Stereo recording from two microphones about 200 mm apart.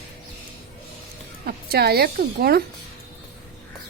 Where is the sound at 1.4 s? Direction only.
50° right (ahead or behind).